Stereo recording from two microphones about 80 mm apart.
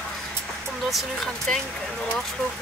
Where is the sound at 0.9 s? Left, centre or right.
Centre.